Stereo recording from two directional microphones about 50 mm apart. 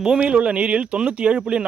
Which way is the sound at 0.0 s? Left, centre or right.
Centre.